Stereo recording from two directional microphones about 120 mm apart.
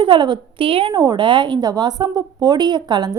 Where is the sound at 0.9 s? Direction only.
35° right (ahead or behind).